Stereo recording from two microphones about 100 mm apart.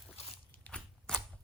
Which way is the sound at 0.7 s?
10° left (ahead or behind).